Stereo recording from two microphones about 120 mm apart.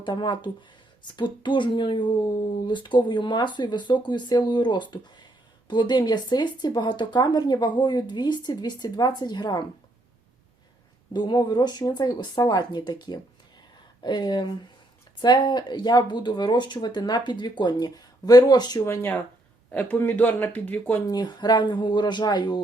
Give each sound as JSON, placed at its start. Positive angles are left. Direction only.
{"t": 0.0, "sound": "speech", "side_deg": 40}
{"t": 11.1, "sound": "speech", "side_deg": 40}
{"t": 18.9, "sound": "speech", "side_deg": 20}
{"t": 21.1, "sound": "speech", "side_deg": 35}